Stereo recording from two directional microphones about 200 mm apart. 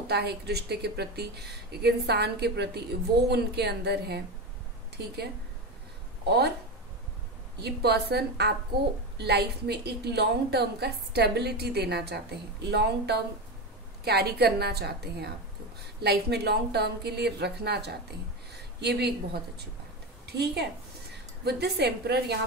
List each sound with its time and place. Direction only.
0.0 s a woman's voice: 55° right (ahead or behind)
7.5 s a woman's voice: 55° right (ahead or behind)